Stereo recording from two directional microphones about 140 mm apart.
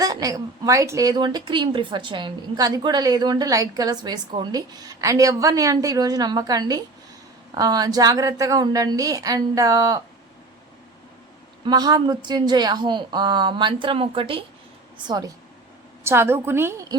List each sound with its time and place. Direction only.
0.0 s a woman's voice: 25° right (ahead or behind)
11.6 s a woman's voice: 30° right (ahead or behind)
15.0 s a woman's voice: 30° right (ahead or behind)
16.0 s a woman's voice: 20° right (ahead or behind)